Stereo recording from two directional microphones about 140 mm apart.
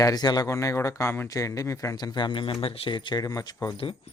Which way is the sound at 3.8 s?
40° left (ahead or behind).